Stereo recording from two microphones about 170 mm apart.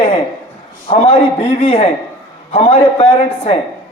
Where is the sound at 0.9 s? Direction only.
35° left (ahead or behind).